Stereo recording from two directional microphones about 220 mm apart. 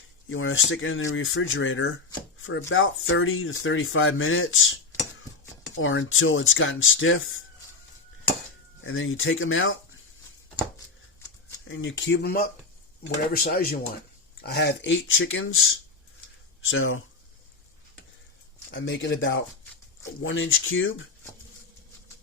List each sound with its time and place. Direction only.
0.3 s speech: 65° left (ahead or behind)
5.7 s speech: 60° left (ahead or behind)
8.8 s speech: 65° left (ahead or behind)
11.7 s speech: 60° left (ahead or behind)
18.7 s speech: 55° left (ahead or behind)